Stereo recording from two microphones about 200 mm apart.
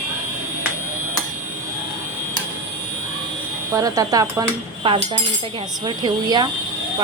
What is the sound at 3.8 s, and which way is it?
A woman's voice, 20° right (ahead or behind).